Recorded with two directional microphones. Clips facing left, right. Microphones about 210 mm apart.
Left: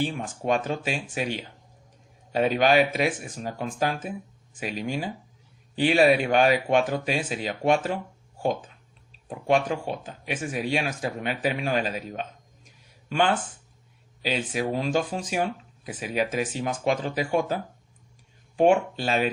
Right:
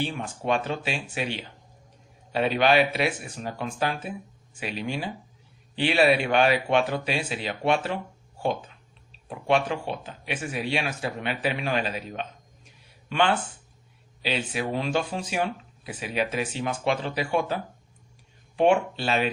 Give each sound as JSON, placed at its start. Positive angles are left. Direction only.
{"t": 0.0, "sound": "speech", "side_deg": 45}
{"t": 12.6, "sound": "a sound", "side_deg": 45}
{"t": 14.2, "sound": "speech", "side_deg": 45}